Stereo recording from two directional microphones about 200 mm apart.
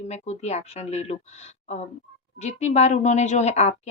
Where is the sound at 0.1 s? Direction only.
35° left (ahead or behind).